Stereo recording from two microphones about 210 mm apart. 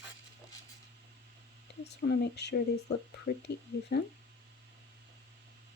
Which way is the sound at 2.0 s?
50° left (ahead or behind).